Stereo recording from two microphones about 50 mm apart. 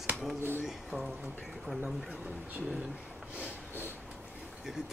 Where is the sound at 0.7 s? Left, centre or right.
Centre.